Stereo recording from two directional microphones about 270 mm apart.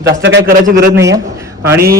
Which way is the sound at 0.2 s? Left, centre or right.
Right.